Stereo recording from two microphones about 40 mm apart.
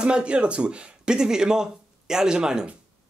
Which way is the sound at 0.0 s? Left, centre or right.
Right.